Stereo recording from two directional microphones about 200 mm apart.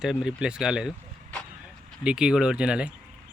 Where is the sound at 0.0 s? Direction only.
5° right (ahead or behind).